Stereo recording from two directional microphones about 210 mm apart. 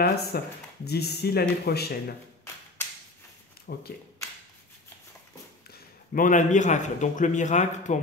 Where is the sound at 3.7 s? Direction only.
50° left (ahead or behind).